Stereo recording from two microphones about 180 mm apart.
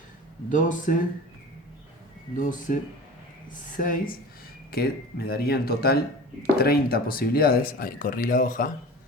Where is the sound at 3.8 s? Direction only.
50° left (ahead or behind).